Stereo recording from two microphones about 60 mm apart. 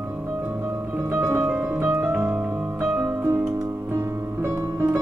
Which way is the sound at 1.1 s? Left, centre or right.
Right.